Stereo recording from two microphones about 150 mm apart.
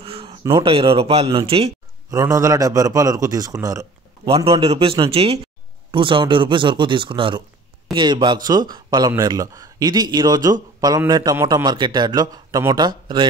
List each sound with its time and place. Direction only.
0.0 s a sound: 40° right (ahead or behind)
0.6 s speech: 35° right (ahead or behind)
2.0 s a man's voice: 25° right (ahead or behind)
4.5 s a man's voice: 40° right (ahead or behind)